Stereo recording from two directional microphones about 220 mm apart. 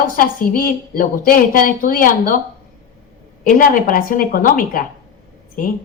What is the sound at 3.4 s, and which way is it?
A woman's voice, 40° left (ahead or behind).